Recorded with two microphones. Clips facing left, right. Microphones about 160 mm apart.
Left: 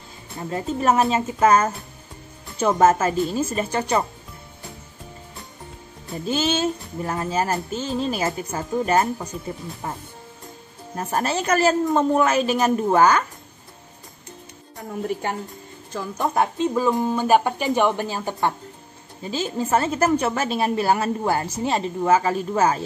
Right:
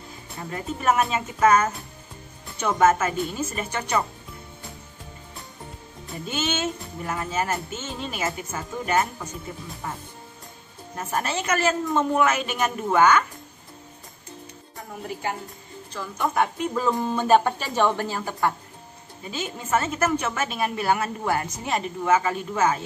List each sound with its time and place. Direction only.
0.5 s speech: 30° left (ahead or behind)
6.2 s speech: 30° left (ahead or behind)
15.9 s speech: 35° left (ahead or behind)
19.2 s speech: 30° left (ahead or behind)